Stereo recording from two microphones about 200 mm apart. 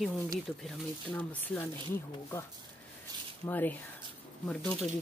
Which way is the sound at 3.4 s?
10° left (ahead or behind).